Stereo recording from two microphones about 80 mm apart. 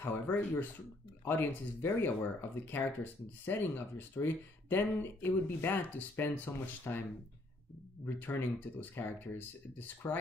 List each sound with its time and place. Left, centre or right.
0.0 s speech: left